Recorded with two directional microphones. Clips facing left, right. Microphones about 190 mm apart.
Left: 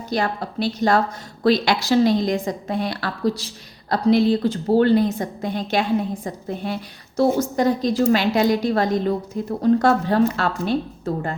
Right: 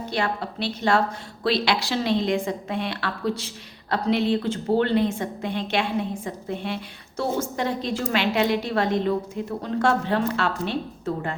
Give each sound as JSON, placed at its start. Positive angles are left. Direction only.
{"t": 0.0, "sound": "a woman's voice", "side_deg": 40}